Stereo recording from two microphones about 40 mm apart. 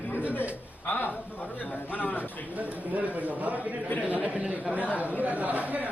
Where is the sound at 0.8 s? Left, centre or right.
Left.